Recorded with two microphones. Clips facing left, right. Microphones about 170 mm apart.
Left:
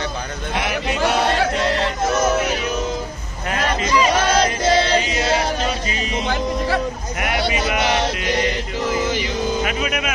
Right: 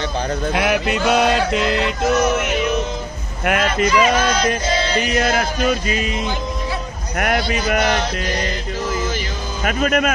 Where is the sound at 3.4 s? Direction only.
65° right (ahead or behind).